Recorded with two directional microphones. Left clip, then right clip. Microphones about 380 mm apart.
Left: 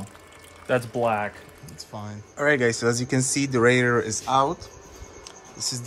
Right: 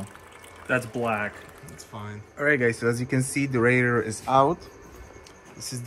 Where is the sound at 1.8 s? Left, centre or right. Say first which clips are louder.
Left 3 dB; centre.